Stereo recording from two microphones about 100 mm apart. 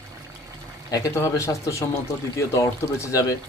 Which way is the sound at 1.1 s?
30° left (ahead or behind).